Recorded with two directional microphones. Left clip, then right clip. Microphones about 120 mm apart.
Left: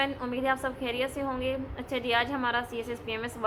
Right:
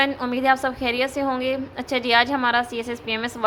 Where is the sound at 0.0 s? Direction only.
40° right (ahead or behind).